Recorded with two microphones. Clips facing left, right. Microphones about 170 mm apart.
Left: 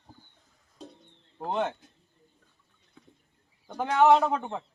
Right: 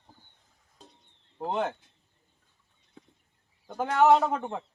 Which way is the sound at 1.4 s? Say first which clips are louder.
Even; 5° right (ahead or behind).